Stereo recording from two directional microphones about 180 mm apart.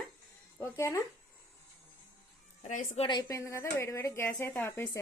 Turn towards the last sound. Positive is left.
turn(degrees=10)  # may be behind; listen again after turning